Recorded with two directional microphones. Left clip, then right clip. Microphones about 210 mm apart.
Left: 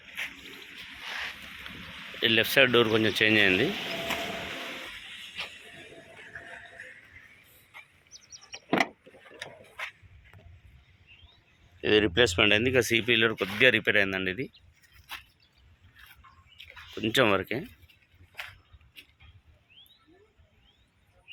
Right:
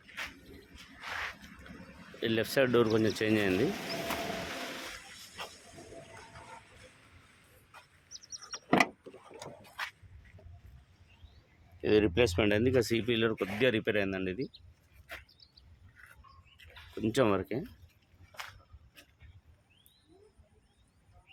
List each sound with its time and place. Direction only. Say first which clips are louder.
1.0 s a sound: left 2 dB; 20° left (ahead or behind)
2.2 s speech: left 7 dB; 5° left (ahead or behind)
3.7 s a sound: left 4 dB; 40° left (ahead or behind)
5.4 s music: left 6 dB; 10° left (ahead or behind)
11.8 s speech: left 4 dB; centre (ahead or behind)
17.0 s speech: left 5 dB; centre (ahead or behind)